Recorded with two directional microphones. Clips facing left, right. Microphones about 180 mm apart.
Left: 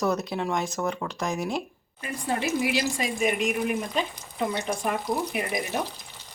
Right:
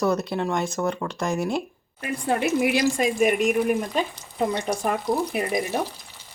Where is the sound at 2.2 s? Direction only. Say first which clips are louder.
Right 4 dB; 55° right (ahead or behind).